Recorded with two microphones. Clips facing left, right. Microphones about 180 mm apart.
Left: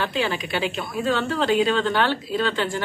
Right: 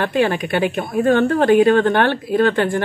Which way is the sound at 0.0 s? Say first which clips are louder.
Right 7 dB; 55° right (ahead or behind).